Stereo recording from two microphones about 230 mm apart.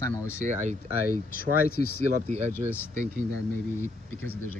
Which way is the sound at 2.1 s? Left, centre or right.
Right.